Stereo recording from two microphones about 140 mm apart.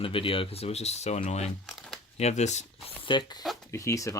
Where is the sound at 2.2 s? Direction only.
50° left (ahead or behind).